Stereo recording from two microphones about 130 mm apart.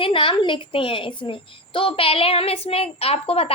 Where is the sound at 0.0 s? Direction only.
40° left (ahead or behind).